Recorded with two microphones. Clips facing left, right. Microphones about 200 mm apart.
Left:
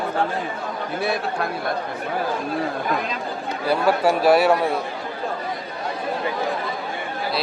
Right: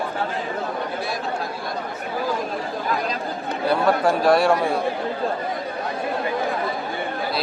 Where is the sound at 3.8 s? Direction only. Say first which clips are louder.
Left 2 dB; 5° left (ahead or behind).